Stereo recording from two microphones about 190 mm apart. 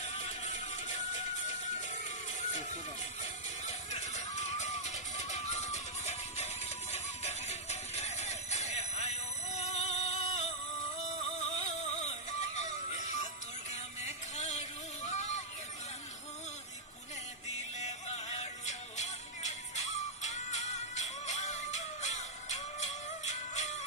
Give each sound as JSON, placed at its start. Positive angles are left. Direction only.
{"t": 0.0, "sound": "music", "side_deg": 35}
{"t": 2.5, "sound": "vehicle", "side_deg": 40}
{"t": 3.7, "sound": "music", "side_deg": 35}
{"t": 15.0, "sound": "vehicle", "side_deg": 35}
{"t": 17.7, "sound": "music", "side_deg": 35}